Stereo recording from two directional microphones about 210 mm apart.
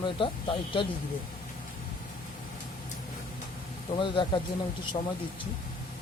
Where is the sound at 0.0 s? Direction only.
25° left (ahead or behind).